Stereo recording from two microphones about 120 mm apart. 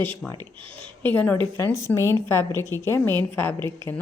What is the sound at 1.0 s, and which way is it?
Speech, 15° left (ahead or behind).